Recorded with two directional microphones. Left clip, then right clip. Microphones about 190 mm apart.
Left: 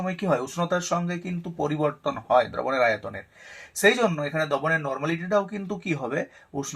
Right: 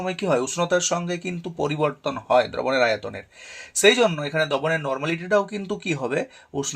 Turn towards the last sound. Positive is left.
turn(degrees=-40)  # may be behind; listen again after turning